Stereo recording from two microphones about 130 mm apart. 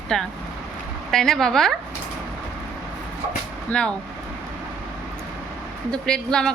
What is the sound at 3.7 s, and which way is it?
Speech, 10° left (ahead or behind).